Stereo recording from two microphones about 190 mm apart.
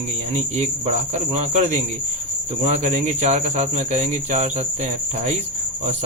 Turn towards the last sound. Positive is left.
turn(degrees=-35)  # may be behind; listen again after turning